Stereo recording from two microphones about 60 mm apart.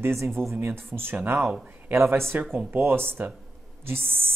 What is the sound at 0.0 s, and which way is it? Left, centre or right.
Speech, right.